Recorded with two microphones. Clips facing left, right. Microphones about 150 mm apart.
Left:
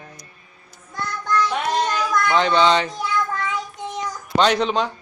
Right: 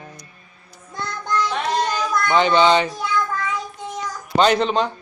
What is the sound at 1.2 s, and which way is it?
Child singing, 20° right (ahead or behind).